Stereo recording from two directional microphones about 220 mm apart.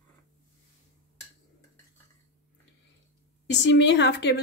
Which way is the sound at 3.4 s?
55° left (ahead or behind).